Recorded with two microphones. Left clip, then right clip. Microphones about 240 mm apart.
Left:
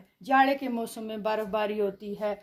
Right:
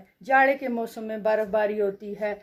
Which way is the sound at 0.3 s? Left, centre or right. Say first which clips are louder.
Right 3 dB; left.